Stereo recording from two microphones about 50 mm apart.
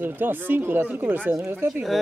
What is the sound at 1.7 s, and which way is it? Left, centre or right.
Speech, centre.